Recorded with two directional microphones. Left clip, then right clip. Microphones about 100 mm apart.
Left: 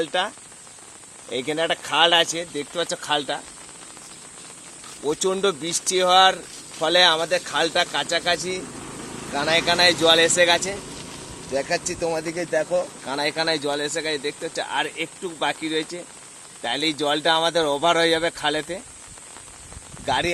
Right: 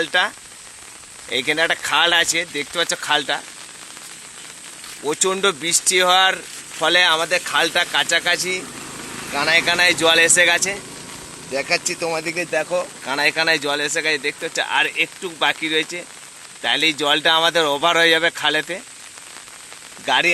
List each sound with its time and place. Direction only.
0.0 s speech: 10° right (ahead or behind)
1.3 s speech: 10° right (ahead or behind)
5.0 s speech: 10° right (ahead or behind)
12.8 s speech: 20° right (ahead or behind)
20.1 s speech: 20° right (ahead or behind)